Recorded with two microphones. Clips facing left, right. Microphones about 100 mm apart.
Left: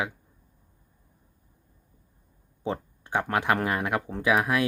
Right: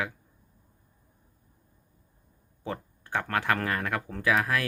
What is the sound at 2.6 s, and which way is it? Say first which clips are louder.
Speech: left 5 dB; 20° left (ahead or behind).